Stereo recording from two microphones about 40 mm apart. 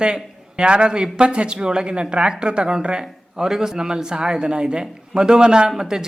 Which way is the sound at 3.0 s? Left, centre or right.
Centre.